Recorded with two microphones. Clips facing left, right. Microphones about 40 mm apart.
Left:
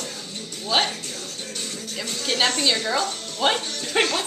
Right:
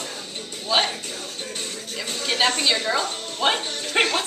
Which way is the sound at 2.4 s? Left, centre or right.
Centre.